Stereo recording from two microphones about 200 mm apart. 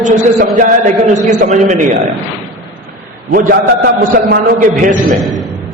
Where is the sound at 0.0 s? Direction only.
40° right (ahead or behind).